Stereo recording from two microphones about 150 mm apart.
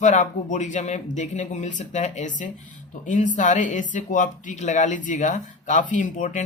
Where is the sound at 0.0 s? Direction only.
55° left (ahead or behind).